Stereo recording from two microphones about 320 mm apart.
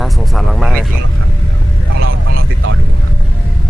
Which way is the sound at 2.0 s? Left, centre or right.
Right.